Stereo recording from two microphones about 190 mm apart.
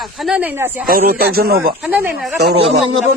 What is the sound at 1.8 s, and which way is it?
Speech, 10° right (ahead or behind).